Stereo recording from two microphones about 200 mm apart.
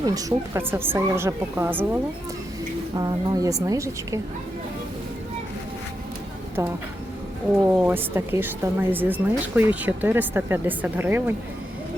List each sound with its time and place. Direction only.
0.0 s speech: 20° right (ahead or behind)
6.6 s speech: 15° right (ahead or behind)